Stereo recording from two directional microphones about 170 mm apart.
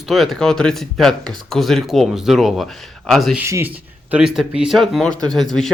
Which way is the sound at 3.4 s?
15° right (ahead or behind).